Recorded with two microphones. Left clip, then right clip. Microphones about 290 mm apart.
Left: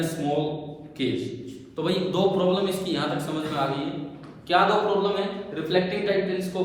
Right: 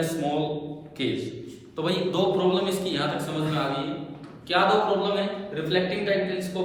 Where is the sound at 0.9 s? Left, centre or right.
Centre.